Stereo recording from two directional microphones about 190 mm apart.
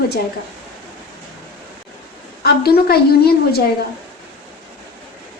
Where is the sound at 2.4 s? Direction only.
55° left (ahead or behind).